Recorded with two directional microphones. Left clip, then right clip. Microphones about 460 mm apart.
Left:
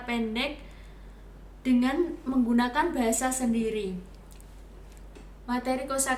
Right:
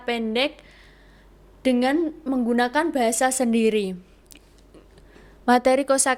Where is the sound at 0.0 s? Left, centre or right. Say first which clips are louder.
Right 7 dB; right.